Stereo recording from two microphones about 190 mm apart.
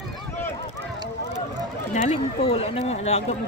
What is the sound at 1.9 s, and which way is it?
Speech, 35° left (ahead or behind).